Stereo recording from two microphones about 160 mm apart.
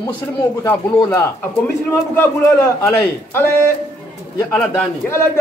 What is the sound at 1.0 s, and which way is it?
A man's voice, 20° left (ahead or behind).